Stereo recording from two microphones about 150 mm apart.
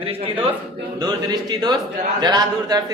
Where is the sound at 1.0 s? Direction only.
25° right (ahead or behind).